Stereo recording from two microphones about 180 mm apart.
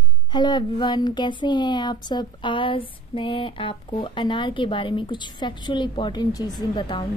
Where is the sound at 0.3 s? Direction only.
25° left (ahead or behind).